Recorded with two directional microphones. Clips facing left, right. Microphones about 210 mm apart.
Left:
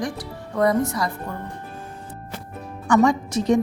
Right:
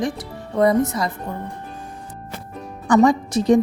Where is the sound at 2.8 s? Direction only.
35° right (ahead or behind).